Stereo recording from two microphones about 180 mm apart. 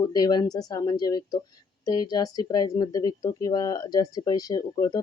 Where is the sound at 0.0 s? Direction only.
20° left (ahead or behind).